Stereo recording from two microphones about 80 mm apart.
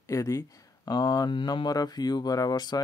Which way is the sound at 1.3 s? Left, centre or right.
Left.